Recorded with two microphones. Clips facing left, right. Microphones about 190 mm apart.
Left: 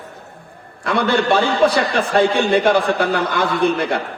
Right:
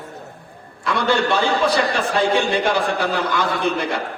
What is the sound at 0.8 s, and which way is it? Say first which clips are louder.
A man's voice: left 2 dB; 55° left (ahead or behind).